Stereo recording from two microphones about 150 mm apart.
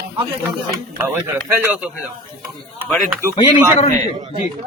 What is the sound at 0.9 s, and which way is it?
Speech, 15° right (ahead or behind).